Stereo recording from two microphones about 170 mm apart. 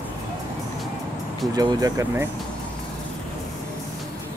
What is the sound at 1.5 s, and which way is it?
Speech, 25° right (ahead or behind).